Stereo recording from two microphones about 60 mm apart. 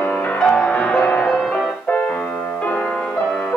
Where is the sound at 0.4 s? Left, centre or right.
Centre.